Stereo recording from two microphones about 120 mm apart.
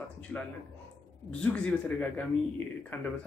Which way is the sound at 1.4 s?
10° left (ahead or behind).